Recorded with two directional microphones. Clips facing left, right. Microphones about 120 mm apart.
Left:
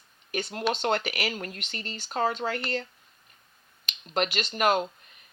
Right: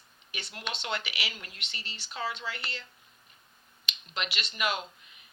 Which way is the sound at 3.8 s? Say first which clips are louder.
Left 9 dB; 45° left (ahead or behind).